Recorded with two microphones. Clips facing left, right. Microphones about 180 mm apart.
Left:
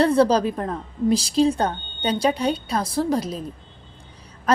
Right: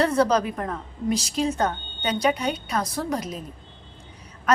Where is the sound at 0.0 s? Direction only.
30° left (ahead or behind).